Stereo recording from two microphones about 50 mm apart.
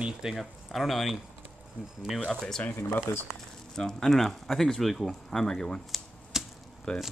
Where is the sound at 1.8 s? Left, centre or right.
Right.